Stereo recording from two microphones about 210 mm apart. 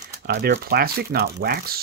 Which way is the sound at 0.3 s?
50° right (ahead or behind).